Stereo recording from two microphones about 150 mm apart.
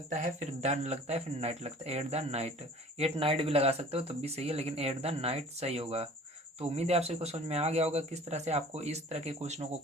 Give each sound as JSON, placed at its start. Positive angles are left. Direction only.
{"t": 0.1, "sound": "speech", "side_deg": -55}